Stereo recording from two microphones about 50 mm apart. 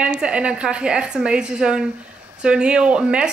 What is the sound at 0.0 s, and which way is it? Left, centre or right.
A woman's voice, right.